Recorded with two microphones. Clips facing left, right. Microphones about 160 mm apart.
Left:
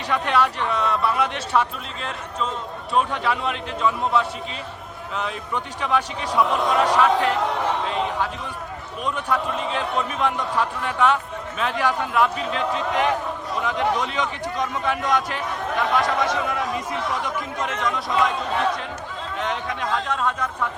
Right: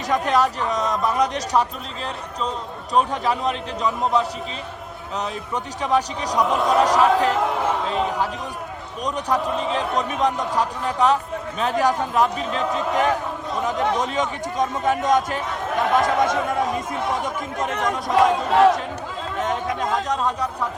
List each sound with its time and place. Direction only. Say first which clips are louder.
0.1 s a man's voice: right 2 dB; 40° right (ahead or behind)
2.9 s a man's voice: right 2 dB; 40° right (ahead or behind)
19.4 s a sound: right 3 dB; 45° right (ahead or behind)